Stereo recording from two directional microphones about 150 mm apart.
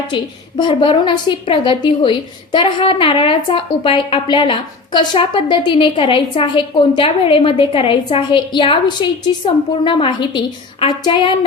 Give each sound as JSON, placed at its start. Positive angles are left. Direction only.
{"t": 0.1, "sound": "a woman's voice", "side_deg": 30}